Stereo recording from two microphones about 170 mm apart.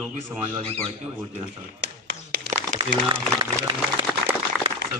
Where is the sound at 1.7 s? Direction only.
75° right (ahead or behind).